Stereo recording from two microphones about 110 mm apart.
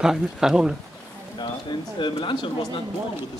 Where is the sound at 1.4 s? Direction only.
45° left (ahead or behind).